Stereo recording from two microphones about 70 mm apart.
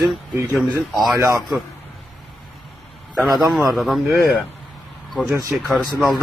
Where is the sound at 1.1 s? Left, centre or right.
Right.